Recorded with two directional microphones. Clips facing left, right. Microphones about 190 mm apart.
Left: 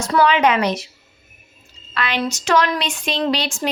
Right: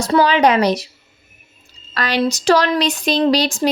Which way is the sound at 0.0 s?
35° right (ahead or behind).